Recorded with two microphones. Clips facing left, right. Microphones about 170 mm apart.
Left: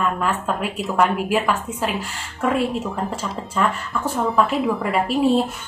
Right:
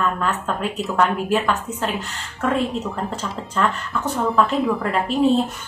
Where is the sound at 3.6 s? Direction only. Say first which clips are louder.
Even; 5° left (ahead or behind).